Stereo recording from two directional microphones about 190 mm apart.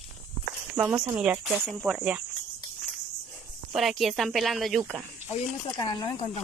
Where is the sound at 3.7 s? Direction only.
Centre (ahead or behind).